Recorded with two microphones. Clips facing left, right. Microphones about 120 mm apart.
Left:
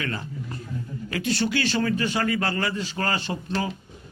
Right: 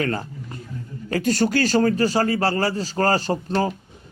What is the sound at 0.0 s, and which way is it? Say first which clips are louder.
A man's voice: right 6 dB; 40° right (ahead or behind).